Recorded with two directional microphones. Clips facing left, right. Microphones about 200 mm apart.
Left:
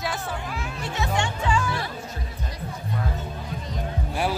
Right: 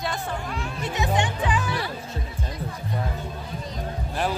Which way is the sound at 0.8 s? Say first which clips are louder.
Right 2 dB; 20° right (ahead or behind).